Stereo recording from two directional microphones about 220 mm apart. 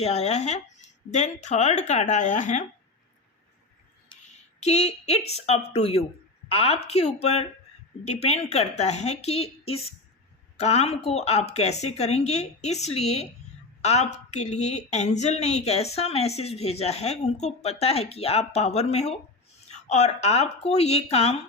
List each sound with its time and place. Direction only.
0.0 s a woman's voice: 30° left (ahead or behind)
4.1 s a sound: 20° left (ahead or behind)
4.6 s speech: 30° left (ahead or behind)